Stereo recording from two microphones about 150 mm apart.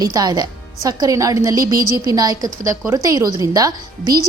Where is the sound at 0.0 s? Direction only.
25° right (ahead or behind).